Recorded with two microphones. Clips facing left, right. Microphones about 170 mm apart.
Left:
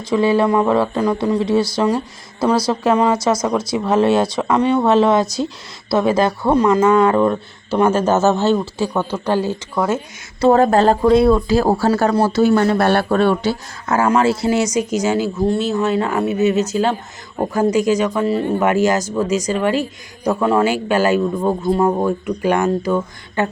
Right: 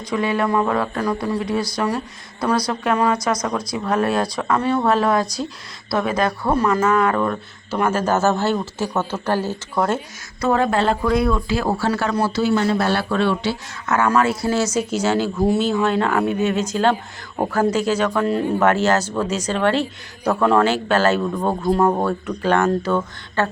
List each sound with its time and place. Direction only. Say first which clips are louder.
0.1 s a man's voice: left 5 dB; 30° left (ahead or behind); by 10.0 s 5° left (ahead or behind)
10.4 s speech: left 6 dB; 40° left (ahead or behind)
13.8 s a man's voice: left 3 dB; 30° left (ahead or behind); by 15.3 s 10° left (ahead or behind)
15.4 s a man's voice: even; centre (ahead or behind)